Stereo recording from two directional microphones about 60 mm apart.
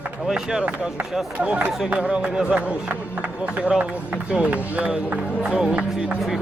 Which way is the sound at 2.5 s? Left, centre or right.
Right.